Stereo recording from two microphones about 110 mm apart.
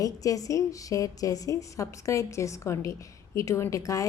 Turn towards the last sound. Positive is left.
turn(degrees=30)  # may be behind; listen again after turning